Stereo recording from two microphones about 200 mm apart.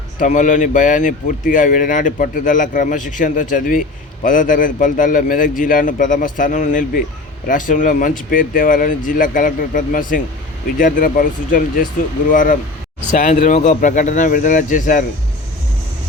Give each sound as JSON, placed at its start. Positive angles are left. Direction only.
{"t": 0.2, "sound": "speech", "side_deg": 40}